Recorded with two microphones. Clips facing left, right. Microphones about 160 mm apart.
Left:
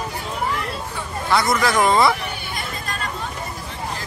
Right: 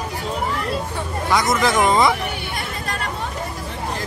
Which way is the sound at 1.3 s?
20° right (ahead or behind).